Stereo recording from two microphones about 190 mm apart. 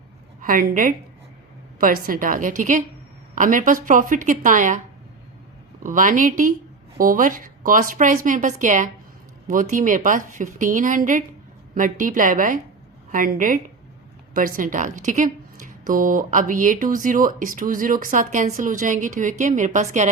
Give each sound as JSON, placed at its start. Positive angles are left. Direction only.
{"t": 0.4, "sound": "a woman's voice", "side_deg": -45}
{"t": 5.8, "sound": "a woman's voice", "side_deg": -45}